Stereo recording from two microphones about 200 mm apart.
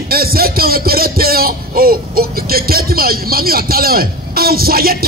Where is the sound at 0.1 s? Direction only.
50° right (ahead or behind).